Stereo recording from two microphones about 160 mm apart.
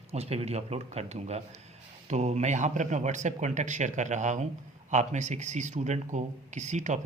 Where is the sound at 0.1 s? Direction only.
40° right (ahead or behind).